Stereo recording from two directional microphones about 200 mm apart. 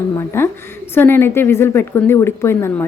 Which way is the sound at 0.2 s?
10° left (ahead or behind).